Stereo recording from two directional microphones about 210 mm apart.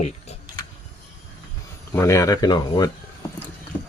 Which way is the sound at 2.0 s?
15° left (ahead or behind).